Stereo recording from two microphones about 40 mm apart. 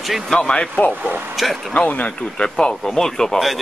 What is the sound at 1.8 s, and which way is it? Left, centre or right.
Speech, left.